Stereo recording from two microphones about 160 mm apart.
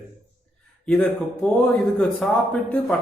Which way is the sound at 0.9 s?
5° left (ahead or behind).